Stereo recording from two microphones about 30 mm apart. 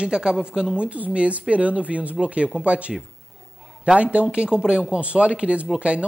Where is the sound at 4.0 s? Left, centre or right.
Right.